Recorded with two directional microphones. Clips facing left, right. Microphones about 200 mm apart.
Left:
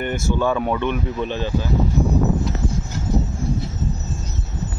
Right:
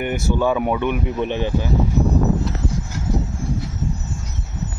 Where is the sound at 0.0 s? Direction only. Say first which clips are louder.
Right 1 dB; 10° right (ahead or behind).